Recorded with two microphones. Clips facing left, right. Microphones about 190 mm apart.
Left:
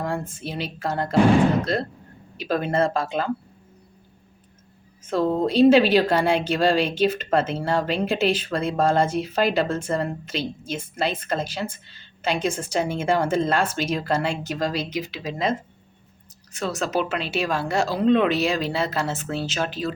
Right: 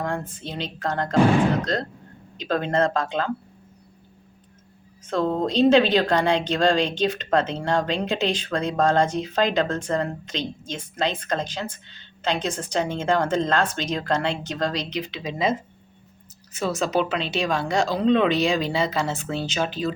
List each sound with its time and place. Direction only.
0.0 s speech: 10° left (ahead or behind)
5.0 s speech: 5° left (ahead or behind)